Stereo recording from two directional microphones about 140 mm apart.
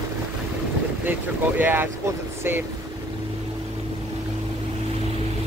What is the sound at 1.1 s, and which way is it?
Speech, 15° right (ahead or behind).